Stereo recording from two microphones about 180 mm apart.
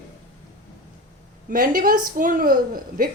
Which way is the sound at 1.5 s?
50° right (ahead or behind).